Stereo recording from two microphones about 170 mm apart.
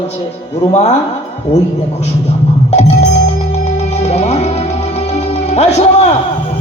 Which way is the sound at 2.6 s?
40° left (ahead or behind).